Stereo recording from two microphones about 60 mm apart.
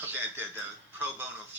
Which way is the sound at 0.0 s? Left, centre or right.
Right.